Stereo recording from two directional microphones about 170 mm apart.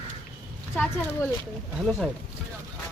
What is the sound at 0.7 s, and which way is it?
Speech, 5° left (ahead or behind).